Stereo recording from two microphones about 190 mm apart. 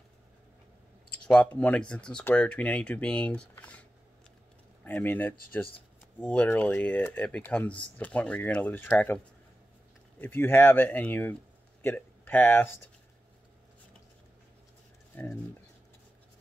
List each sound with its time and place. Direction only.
1.2 s speech: 5° left (ahead or behind)
4.8 s speech: 10° left (ahead or behind)
10.2 s speech: 10° left (ahead or behind)
15.1 s speech: 10° left (ahead or behind)